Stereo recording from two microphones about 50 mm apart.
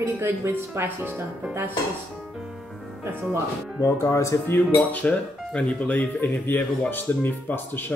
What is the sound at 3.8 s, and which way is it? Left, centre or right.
Speech, left.